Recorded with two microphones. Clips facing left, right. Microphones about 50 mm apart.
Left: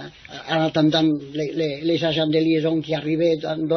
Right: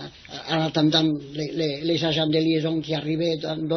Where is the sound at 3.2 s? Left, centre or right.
Left.